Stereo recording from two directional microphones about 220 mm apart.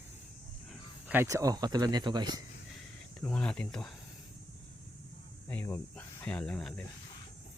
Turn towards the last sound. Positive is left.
turn(degrees=5)  # may be behind; listen again after turning